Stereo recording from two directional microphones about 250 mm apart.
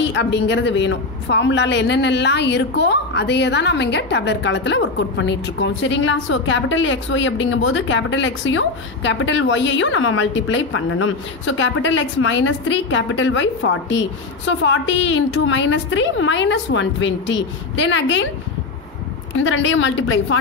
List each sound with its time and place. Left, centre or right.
0.0 s a woman's voice: left
19.3 s a woman's voice: left